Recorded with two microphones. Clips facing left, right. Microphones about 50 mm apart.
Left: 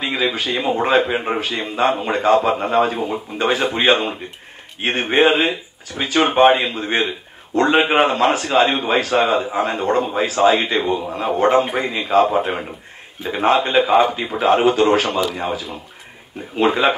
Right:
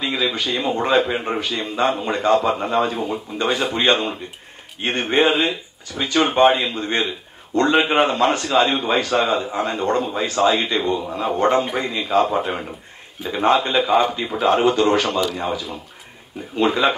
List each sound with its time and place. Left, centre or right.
0.0 s speech: left
0.4 s a man's voice: centre
16.5 s a man's voice: centre